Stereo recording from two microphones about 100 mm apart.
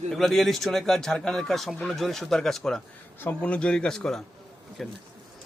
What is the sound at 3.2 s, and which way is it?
Speech, 15° left (ahead or behind).